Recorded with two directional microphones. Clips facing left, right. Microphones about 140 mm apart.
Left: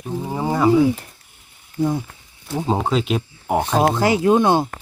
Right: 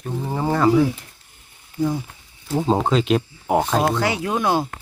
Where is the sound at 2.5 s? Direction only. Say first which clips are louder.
Right 1 dB; centre (ahead or behind).